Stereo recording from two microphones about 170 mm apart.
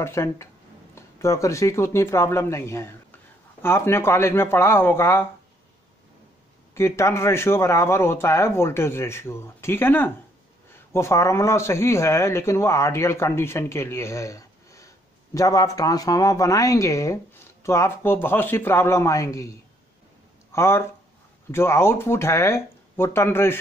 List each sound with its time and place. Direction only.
0.0 s speech: 15° left (ahead or behind)
6.7 s a woman's voice: 15° left (ahead or behind)
20.5 s speech: 15° left (ahead or behind)